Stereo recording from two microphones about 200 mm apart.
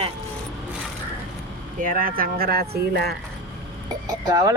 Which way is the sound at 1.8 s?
45° right (ahead or behind).